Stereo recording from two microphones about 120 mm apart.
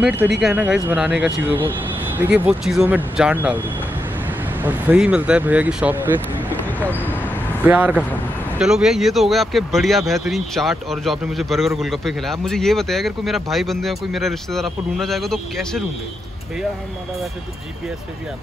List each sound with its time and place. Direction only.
0.0 s speech: 15° right (ahead or behind)
6.8 s a sound: 15° left (ahead or behind)
7.6 s speech: 15° right (ahead or behind); by 15.8 s 5° left (ahead or behind)